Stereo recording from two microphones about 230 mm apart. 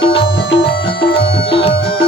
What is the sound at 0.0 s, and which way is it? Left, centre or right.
Music, left.